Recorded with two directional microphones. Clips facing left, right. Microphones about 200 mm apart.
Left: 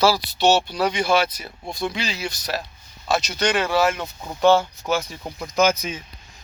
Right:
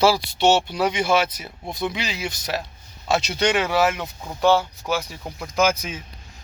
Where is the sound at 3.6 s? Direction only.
15° right (ahead or behind).